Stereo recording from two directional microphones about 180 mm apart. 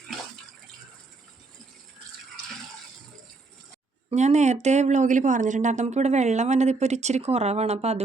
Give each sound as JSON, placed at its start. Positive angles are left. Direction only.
{"t": 4.1, "sound": "speech", "side_deg": -40}